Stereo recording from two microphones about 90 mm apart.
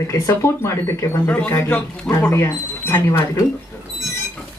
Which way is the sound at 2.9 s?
30° left (ahead or behind).